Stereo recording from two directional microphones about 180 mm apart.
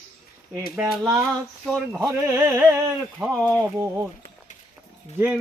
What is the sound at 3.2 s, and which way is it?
Music, centre (ahead or behind).